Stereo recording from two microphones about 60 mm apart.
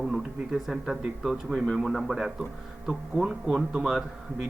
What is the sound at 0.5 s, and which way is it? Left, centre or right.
A man's voice, centre.